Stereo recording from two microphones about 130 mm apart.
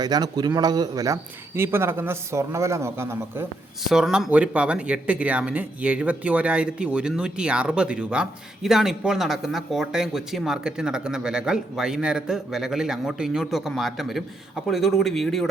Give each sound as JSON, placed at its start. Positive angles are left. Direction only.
{"t": 0.0, "sound": "speech", "side_deg": -30}
{"t": 3.8, "sound": "speech", "side_deg": -5}